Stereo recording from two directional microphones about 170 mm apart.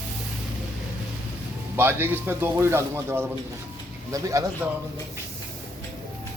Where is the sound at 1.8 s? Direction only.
15° right (ahead or behind).